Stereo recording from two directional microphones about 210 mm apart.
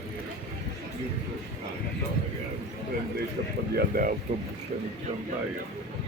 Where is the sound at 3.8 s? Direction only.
40° right (ahead or behind).